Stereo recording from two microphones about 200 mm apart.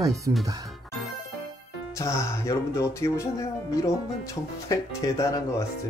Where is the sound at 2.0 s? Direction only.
15° left (ahead or behind).